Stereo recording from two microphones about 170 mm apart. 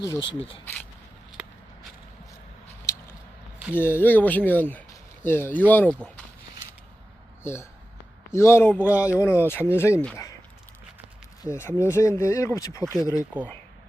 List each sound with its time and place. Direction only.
0.0 s speech: 20° left (ahead or behind)
0.3 s speech: 30° left (ahead or behind)
2.9 s a sound: 15° left (ahead or behind)
3.8 s speech: 10° left (ahead or behind)
7.4 s speech: 15° left (ahead or behind)
11.4 s speech: 15° left (ahead or behind)